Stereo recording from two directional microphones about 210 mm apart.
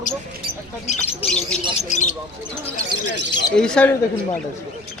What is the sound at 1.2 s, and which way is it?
Speech, 30° left (ahead or behind).